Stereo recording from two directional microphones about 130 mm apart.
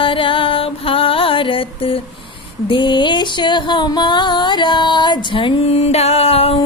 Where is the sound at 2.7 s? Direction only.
40° left (ahead or behind).